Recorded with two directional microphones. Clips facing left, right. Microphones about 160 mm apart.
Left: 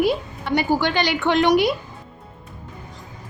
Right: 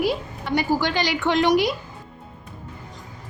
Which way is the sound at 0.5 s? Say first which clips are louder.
Left 2 dB; 60° left (ahead or behind).